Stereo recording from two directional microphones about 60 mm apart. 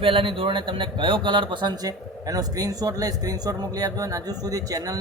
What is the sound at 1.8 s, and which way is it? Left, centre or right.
Speech, right.